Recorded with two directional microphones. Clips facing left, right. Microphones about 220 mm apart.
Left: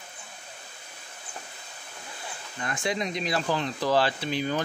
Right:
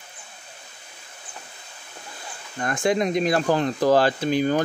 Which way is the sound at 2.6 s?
50° right (ahead or behind).